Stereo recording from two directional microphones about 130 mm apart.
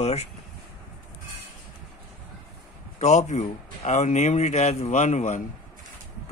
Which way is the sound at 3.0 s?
60° left (ahead or behind).